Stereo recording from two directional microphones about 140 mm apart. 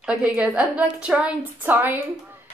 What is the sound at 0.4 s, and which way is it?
Speech, 10° right (ahead or behind).